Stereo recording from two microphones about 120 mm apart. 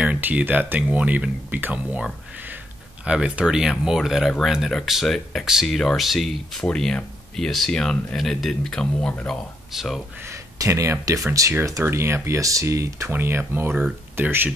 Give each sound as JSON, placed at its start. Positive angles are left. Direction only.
{"t": 0.0, "sound": "speech", "side_deg": -10}
{"t": 3.1, "sound": "speech", "side_deg": -10}
{"t": 9.7, "sound": "speech", "side_deg": 0}
{"t": 10.2, "sound": "speech", "side_deg": -25}